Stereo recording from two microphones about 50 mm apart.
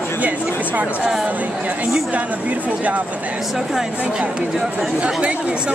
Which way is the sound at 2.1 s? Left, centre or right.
Right.